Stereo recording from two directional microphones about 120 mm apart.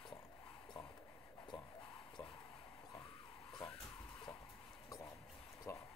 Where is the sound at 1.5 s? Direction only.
40° left (ahead or behind).